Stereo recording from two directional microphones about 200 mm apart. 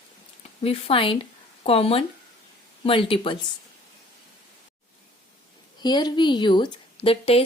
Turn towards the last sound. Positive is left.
turn(degrees=30)  # may be behind; listen again after turning